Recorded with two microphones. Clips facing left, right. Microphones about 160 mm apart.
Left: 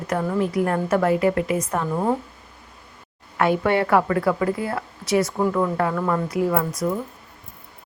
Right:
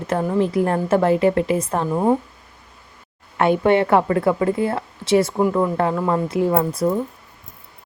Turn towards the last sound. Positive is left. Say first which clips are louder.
# right 3 dB
turn(degrees=-30)  # may be behind; listen again after turning